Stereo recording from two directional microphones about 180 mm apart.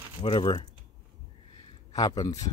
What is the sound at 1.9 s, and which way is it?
Speech, 20° left (ahead or behind).